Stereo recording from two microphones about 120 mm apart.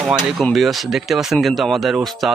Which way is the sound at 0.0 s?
5° right (ahead or behind).